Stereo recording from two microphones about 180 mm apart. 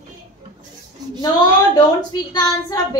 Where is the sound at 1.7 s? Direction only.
20° left (ahead or behind).